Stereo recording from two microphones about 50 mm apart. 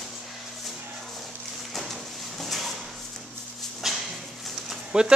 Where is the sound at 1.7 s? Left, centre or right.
Centre.